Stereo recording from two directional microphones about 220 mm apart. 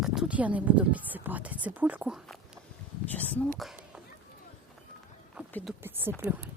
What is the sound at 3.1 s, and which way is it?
Speech, 5° left (ahead or behind).